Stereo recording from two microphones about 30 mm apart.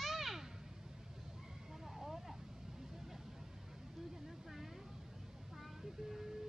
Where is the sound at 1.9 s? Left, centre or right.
Centre.